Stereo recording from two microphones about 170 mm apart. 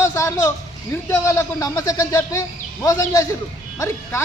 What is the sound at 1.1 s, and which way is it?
Speech, 20° left (ahead or behind).